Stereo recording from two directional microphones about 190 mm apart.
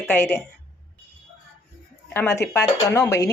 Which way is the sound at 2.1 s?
15° left (ahead or behind).